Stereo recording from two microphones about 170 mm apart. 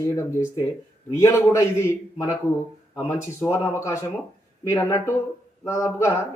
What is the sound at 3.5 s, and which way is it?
Speech, 15° left (ahead or behind).